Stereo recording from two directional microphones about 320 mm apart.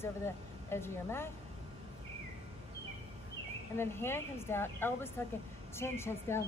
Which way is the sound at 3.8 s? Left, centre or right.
Centre.